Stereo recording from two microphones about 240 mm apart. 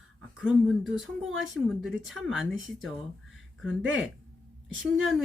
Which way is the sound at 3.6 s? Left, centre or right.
Right.